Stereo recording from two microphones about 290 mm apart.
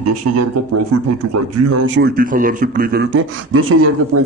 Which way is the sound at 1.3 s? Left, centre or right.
Right.